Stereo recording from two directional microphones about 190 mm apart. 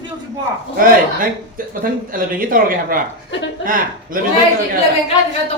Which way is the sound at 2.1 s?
45° right (ahead or behind).